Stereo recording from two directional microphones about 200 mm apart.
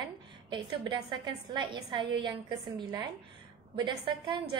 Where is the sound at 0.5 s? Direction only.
25° right (ahead or behind).